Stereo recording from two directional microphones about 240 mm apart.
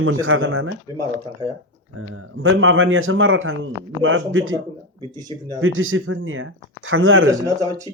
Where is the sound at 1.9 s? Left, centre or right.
Right.